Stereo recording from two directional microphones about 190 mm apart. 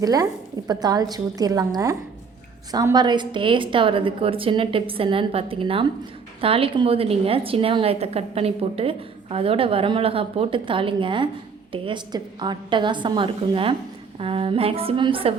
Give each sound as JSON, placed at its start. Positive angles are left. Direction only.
{"t": 0.0, "sound": "a woman's voice", "side_deg": -20}